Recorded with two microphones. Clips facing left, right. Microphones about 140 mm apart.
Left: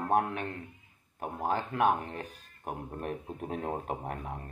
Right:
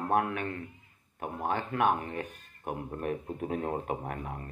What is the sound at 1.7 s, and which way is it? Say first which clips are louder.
Speech: right 1 dB; 35° left (ahead or behind).